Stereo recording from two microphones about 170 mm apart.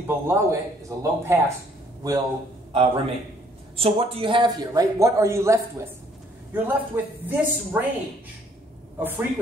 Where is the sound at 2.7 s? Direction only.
30° right (ahead or behind); by 7.9 s 10° right (ahead or behind).